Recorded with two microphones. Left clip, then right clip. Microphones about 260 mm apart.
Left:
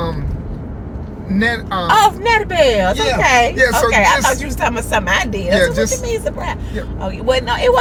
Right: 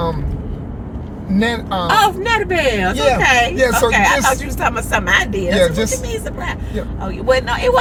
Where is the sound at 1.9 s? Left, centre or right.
Centre.